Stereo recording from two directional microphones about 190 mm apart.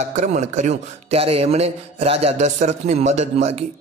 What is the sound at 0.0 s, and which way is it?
A man's voice, 40° right (ahead or behind).